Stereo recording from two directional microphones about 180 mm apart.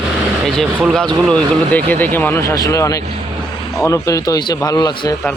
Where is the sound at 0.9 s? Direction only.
5° left (ahead or behind); by 5.1 s 20° left (ahead or behind).